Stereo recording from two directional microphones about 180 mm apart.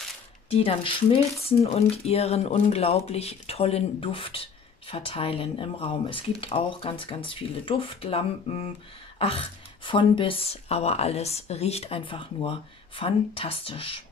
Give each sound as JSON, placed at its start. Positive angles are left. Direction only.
{"t": 0.5, "sound": "speech", "side_deg": 30}